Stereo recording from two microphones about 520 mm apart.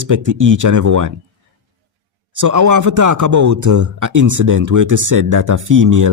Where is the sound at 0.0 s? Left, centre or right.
Right.